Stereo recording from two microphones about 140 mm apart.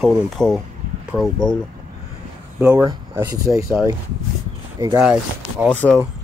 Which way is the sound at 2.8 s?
25° right (ahead or behind).